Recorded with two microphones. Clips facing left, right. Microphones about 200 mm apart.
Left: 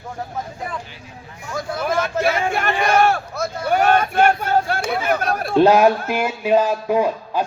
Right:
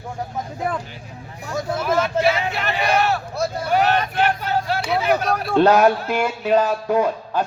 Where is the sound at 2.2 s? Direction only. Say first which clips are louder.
Left 1 dB; 50° left (ahead or behind).